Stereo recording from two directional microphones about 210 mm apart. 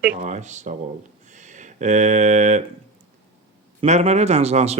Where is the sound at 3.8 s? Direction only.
30° right (ahead or behind).